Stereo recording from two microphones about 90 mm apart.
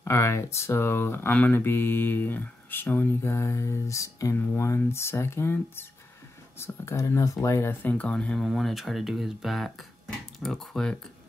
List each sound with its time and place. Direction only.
0.0 s speech: 30° left (ahead or behind)
7.8 s speech: 15° left (ahead or behind)
8.5 s speech: centre (ahead or behind)